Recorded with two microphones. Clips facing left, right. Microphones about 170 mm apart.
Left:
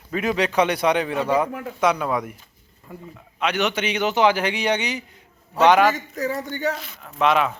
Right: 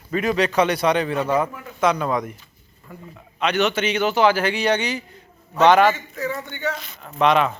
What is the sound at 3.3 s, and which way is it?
A man's voice, 10° left (ahead or behind).